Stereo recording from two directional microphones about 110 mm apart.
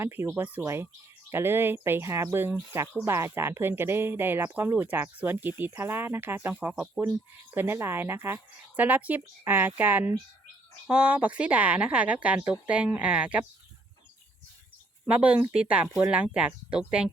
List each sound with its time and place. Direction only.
0.0 s speech: 20° right (ahead or behind)
15.0 s speech: 10° right (ahead or behind)